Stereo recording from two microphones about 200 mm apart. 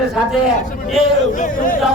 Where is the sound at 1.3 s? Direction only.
40° left (ahead or behind).